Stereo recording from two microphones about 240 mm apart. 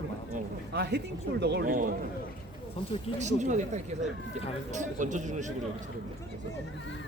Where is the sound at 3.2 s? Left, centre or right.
Right.